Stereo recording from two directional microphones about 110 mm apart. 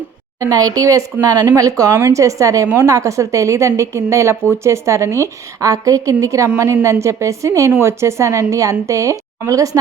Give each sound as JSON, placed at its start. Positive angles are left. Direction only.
{"t": 0.3, "sound": "a woman's voice", "side_deg": -30}